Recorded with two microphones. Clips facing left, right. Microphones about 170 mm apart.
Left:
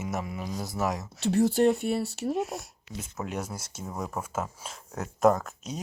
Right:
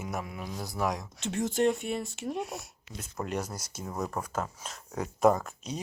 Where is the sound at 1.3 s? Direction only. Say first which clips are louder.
Left 5 dB; 35° left (ahead or behind).